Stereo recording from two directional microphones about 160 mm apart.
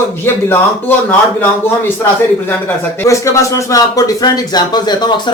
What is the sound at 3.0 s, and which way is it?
Speech, 20° left (ahead or behind).